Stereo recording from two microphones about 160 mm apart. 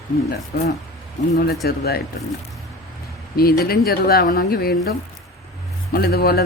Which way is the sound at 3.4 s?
70° left (ahead or behind).